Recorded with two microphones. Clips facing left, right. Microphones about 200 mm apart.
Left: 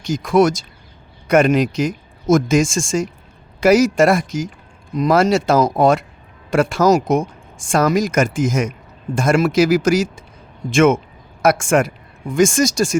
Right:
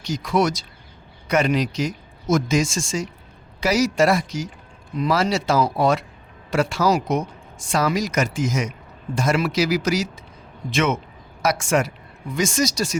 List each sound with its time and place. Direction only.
0.0 s speech: 50° left (ahead or behind)